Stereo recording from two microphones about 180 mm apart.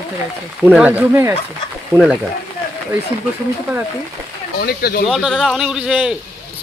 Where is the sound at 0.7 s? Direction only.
5° right (ahead or behind).